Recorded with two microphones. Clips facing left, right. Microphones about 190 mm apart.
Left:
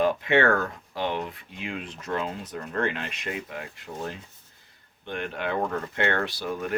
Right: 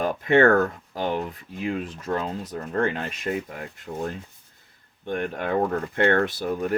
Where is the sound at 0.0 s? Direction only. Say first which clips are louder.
Right 3 dB; 45° right (ahead or behind).